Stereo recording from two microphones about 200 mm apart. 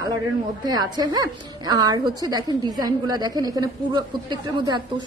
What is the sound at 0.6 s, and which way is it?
A woman's voice, 20° right (ahead or behind).